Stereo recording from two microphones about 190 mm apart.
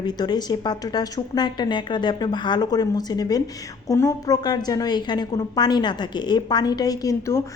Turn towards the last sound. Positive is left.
turn(degrees=15)  # may be behind; listen again after turning